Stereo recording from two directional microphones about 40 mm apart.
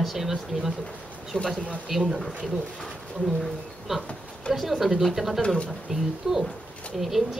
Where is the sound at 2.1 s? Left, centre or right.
Centre.